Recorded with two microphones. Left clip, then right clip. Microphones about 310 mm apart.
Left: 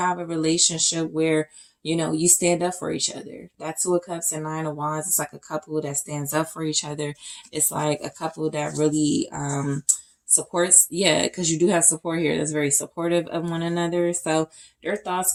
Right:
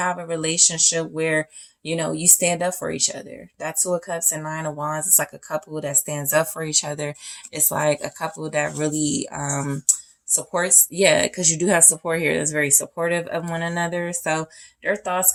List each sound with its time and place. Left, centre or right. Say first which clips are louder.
0.0 s speech: even; right
11.0 s speech: right 7 dB; right